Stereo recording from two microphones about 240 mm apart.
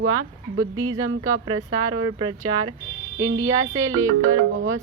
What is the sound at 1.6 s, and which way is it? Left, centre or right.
Speech, right.